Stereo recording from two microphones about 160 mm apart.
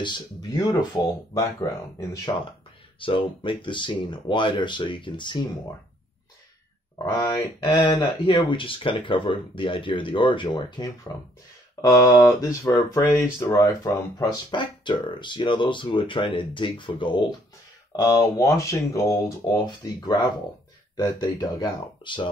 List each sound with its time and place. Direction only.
0.0 s speech: 25° left (ahead or behind)
3.0 s speech: 30° left (ahead or behind)
7.2 s speech: 20° left (ahead or behind)
18.0 s speech: 20° left (ahead or behind)